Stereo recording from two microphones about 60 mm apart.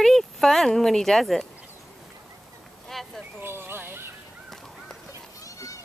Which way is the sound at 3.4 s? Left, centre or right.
Right.